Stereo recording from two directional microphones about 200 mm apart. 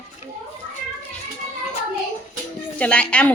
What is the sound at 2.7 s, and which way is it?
Speech, 5° left (ahead or behind).